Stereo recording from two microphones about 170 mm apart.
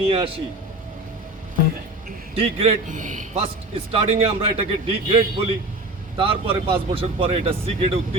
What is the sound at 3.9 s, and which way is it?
Speech, 35° right (ahead or behind).